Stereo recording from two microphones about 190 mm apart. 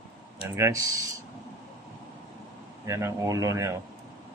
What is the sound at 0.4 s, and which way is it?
Speech, 15° right (ahead or behind).